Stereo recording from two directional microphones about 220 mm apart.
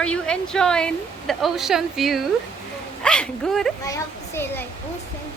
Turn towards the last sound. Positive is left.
turn(degrees=10)  # may be behind; listen again after turning